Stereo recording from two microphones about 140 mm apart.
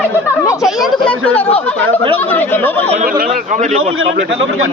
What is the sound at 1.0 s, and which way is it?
Speech, 10° left (ahead or behind).